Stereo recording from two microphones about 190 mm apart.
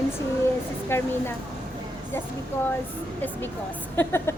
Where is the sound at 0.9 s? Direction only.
10° left (ahead or behind).